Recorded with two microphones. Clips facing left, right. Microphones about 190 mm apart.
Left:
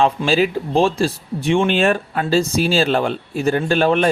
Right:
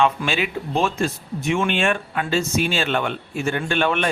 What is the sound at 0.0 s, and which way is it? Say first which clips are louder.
Speech: left 5 dB; 35° left (ahead or behind).